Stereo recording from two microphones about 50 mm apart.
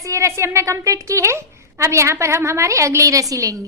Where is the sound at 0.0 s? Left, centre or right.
Right.